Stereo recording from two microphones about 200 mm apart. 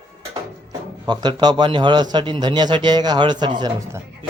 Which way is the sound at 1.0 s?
20° right (ahead or behind).